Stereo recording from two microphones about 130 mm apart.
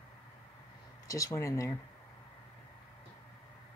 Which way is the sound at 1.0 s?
25° left (ahead or behind).